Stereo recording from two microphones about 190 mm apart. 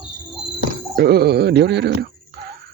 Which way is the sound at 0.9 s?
60° right (ahead or behind).